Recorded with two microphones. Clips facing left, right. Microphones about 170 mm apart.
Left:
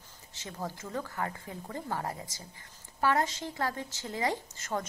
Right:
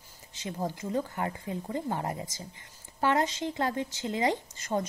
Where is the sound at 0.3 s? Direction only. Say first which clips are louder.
Right 5 dB; 20° right (ahead or behind).